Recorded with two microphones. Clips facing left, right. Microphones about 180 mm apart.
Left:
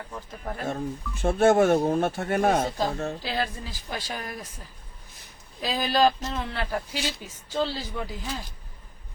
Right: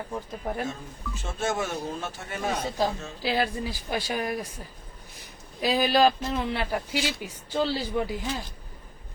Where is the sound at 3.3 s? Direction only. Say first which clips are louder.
Right 3 dB; 15° right (ahead or behind).